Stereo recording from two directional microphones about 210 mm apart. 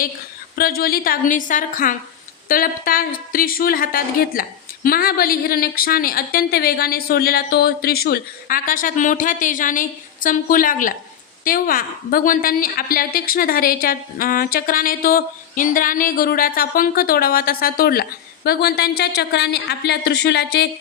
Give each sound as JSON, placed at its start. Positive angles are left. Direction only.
{"t": 0.5, "sound": "a woman's voice", "side_deg": 45}